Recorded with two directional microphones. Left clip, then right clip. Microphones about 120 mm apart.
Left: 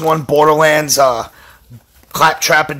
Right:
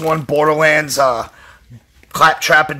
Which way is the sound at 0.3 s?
15° left (ahead or behind).